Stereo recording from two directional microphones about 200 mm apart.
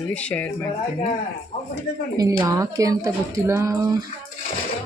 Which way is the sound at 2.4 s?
15° right (ahead or behind).